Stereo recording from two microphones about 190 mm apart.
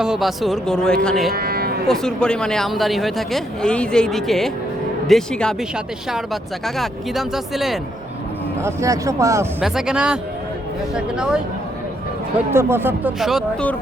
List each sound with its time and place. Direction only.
0.0 s speech: centre (ahead or behind)
1.3 s cattle: 55° right (ahead or behind)
1.9 s speech: 5° left (ahead or behind)
8.6 s speech: 15° right (ahead or behind)
9.6 s speech: 5° right (ahead or behind)
12.5 s speech: 10° right (ahead or behind)